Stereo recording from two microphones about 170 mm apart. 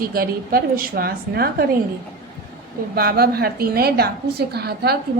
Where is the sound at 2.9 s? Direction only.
65° right (ahead or behind).